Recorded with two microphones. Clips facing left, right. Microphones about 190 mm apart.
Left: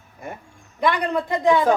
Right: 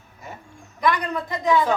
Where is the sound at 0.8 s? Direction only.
30° left (ahead or behind).